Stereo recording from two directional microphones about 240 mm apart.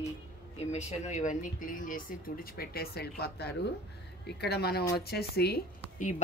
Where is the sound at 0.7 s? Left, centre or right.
Left.